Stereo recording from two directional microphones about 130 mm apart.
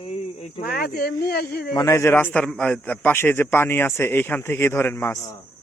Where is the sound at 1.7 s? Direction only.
25° left (ahead or behind).